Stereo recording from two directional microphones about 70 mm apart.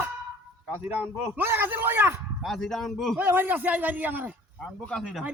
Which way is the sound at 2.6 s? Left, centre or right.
Centre.